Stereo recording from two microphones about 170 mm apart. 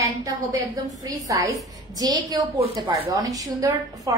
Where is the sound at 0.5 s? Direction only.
20° right (ahead or behind).